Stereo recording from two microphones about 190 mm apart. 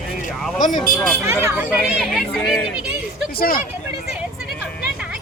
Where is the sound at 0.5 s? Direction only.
45° left (ahead or behind).